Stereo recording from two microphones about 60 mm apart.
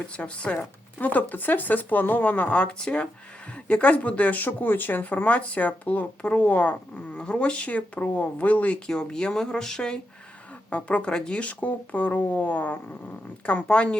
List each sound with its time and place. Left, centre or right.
0.2 s speech: centre
8.9 s speech: centre; by 12.8 s left
13.4 s speech: centre